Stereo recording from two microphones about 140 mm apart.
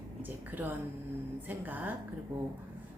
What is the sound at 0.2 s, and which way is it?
Speech, 15° right (ahead or behind).